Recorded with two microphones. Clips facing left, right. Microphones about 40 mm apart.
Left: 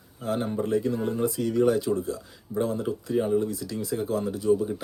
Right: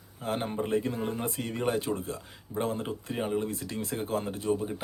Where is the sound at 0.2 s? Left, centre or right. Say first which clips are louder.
Left 3 dB; right.